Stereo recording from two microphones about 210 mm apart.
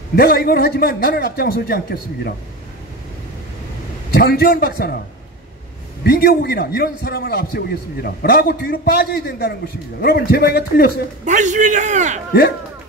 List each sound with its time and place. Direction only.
0.1 s a man's voice: 45° left (ahead or behind)
4.1 s a man's voice: 50° left (ahead or behind)
6.0 s a man's voice: 45° left (ahead or behind)
11.2 s a man's voice: 35° right (ahead or behind)